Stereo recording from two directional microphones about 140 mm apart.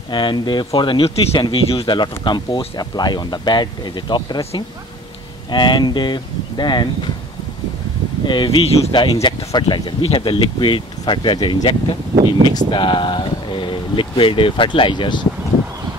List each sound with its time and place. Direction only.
0.1 s speech: 35° left (ahead or behind)
5.5 s speech: 35° left (ahead or behind)
8.3 s speech: 40° left (ahead or behind)
8.9 s speech: 35° left (ahead or behind)